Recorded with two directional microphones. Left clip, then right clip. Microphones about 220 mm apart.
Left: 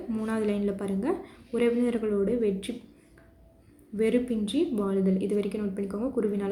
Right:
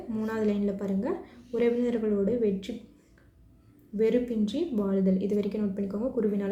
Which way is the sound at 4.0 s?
20° left (ahead or behind).